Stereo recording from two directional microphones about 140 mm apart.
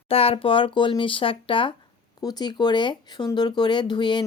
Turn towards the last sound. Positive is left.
turn(degrees=35)  # may be behind; listen again after turning